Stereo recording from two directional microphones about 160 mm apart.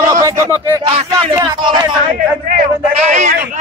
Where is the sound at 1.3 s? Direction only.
25° right (ahead or behind).